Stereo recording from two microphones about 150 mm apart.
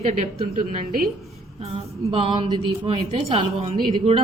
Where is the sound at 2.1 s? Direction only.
35° right (ahead or behind).